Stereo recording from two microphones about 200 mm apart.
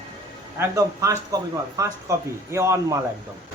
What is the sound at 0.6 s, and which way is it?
Speech, 15° right (ahead or behind).